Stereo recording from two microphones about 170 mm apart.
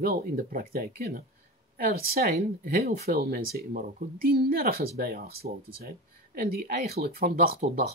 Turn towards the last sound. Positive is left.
turn(degrees=-60)  # may be behind; listen again after turning